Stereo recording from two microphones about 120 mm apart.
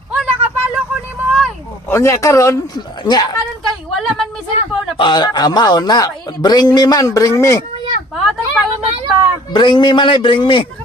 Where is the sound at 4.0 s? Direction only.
Centre (ahead or behind).